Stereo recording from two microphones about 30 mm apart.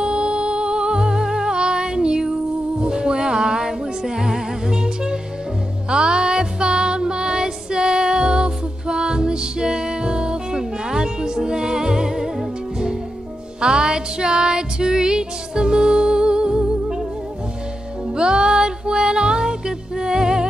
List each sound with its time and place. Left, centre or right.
0.0 s music: right
13.6 s music: right
18.1 s music: right